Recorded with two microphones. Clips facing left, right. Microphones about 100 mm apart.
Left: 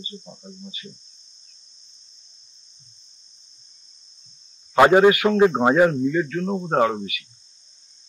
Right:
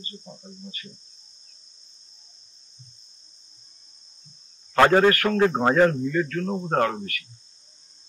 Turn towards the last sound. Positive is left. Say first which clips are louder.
# left 3 dB
turn(degrees=10)  # may be behind; listen again after turning